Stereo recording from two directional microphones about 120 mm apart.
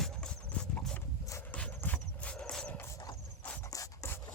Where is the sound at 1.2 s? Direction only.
25° left (ahead or behind).